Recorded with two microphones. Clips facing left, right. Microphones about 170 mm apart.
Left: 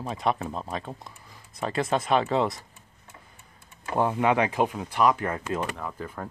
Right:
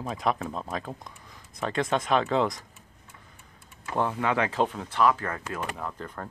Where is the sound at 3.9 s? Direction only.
15° left (ahead or behind).